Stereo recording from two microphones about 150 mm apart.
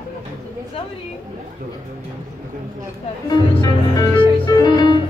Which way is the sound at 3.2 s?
20° left (ahead or behind).